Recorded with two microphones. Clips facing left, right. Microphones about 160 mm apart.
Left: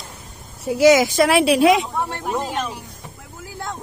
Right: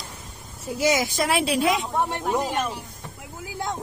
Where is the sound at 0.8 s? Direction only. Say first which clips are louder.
Left 9 dB; 85° left.